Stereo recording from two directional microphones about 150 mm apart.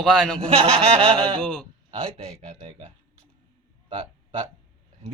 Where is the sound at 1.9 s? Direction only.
40° right (ahead or behind).